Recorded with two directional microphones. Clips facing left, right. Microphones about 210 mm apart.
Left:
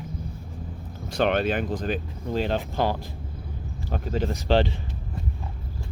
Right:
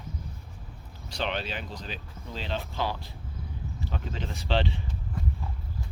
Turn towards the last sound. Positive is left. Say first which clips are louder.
# left 7 dB
turn(degrees=45)  # may be behind; listen again after turning